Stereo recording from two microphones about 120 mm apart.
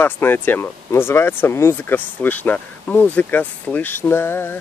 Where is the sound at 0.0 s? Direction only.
15° left (ahead or behind).